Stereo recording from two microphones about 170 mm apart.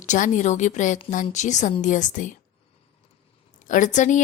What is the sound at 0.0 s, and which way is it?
A woman's voice, 45° left (ahead or behind).